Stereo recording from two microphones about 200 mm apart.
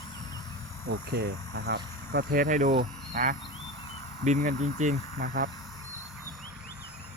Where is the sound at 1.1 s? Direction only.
55° right (ahead or behind).